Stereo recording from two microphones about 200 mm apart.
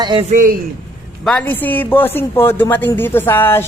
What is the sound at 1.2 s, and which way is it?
A woman's voice, 5° left (ahead or behind).